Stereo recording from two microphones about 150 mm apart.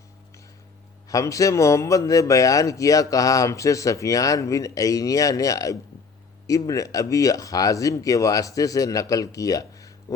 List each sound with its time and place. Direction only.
1.0 s a man's voice: 20° left (ahead or behind)